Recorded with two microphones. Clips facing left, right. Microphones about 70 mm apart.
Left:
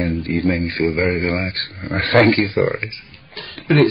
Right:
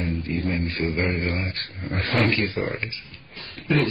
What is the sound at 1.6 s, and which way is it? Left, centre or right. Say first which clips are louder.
Speech: left 6 dB; left.